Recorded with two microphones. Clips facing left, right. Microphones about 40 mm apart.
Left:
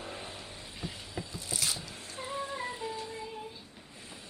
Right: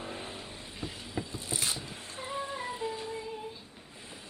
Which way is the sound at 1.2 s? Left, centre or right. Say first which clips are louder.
Right 1 dB; right.